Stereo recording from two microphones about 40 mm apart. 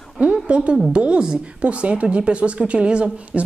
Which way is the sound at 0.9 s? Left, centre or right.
Right.